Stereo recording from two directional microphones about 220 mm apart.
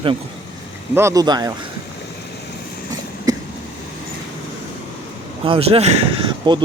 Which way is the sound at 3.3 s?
15° right (ahead or behind).